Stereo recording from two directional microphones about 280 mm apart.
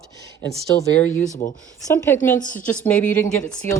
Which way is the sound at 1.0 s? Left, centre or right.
Left.